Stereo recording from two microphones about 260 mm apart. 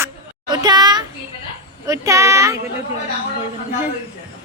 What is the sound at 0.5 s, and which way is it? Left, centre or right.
A woman's voice, centre.